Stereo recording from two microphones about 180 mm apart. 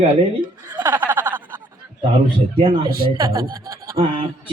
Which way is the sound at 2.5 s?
25° right (ahead or behind).